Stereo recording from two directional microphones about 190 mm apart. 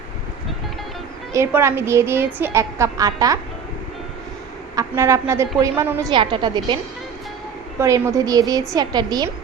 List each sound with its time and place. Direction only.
1.3 s a woman's voice: 15° right (ahead or behind)
4.7 s a woman's voice: 15° right (ahead or behind)
7.8 s a woman's voice: 15° right (ahead or behind)